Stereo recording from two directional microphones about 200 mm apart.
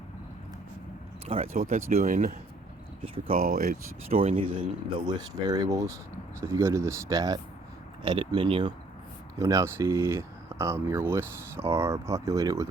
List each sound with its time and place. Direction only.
1.5 s speech: 40° right (ahead or behind)
4.2 s speech: 30° right (ahead or behind)